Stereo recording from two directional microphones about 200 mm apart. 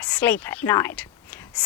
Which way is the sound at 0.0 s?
5° left (ahead or behind).